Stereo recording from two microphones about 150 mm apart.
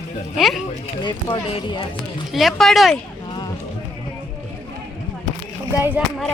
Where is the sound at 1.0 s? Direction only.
30° left (ahead or behind).